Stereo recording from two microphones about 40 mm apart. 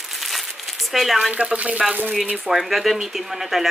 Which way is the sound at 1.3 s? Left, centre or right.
Right.